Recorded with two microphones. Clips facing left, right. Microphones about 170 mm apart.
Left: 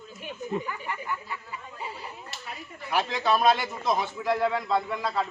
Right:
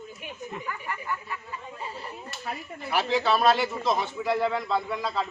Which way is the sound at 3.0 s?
5° right (ahead or behind).